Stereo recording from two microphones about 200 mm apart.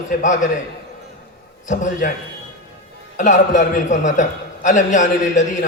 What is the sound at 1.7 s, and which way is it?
Speech, 40° left (ahead or behind).